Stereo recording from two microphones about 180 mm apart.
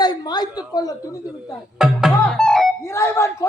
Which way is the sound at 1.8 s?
Centre (ahead or behind).